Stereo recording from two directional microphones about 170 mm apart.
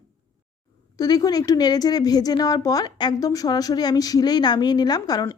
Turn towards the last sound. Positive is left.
turn(degrees=25)  # may be behind; listen again after turning